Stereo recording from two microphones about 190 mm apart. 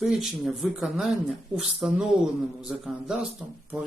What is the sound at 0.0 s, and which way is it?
Speech, centre (ahead or behind).